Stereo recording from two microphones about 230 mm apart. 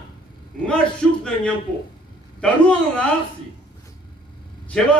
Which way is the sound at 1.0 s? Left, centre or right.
Centre.